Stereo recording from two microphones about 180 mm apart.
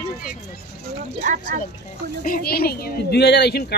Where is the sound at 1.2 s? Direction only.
45° right (ahead or behind).